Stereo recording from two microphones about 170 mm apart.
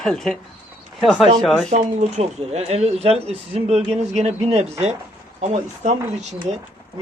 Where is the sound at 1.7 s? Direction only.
40° right (ahead or behind).